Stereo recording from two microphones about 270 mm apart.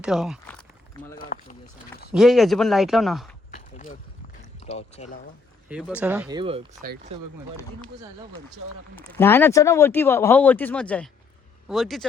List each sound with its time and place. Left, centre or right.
0.0 s speech: centre
1.2 s speech: left
2.1 s speech: centre
3.5 s a sound: left
4.6 s speech: left
5.6 s speech: centre
6.2 s speech: centre
6.8 s speech: right
9.1 s speech: centre